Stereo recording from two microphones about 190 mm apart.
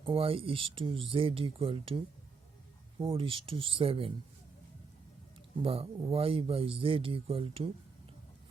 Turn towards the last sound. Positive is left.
turn(degrees=-30)  # may be behind; listen again after turning